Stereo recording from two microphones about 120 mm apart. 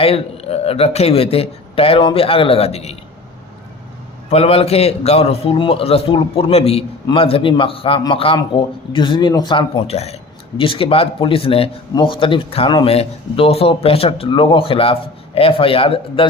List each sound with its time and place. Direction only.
0.0 s speech: 55° left (ahead or behind)
4.3 s speech: 55° left (ahead or behind); by 9.8 s 40° left (ahead or behind)
9.8 s speech: 60° left (ahead or behind)
10.6 s speech: 50° left (ahead or behind)